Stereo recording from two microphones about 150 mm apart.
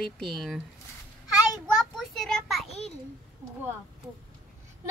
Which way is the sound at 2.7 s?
45° left (ahead or behind).